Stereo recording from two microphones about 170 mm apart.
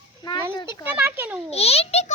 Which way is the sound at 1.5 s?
35° left (ahead or behind).